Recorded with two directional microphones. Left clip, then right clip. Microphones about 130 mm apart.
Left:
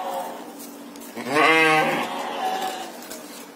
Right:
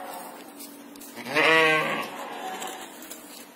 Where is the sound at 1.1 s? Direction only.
20° left (ahead or behind).